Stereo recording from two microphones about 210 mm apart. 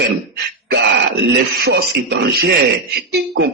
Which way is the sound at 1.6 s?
55° right (ahead or behind).